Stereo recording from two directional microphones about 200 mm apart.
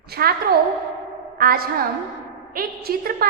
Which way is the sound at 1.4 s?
45° right (ahead or behind).